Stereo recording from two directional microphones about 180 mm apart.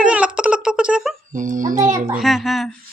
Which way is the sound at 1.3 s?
45° right (ahead or behind).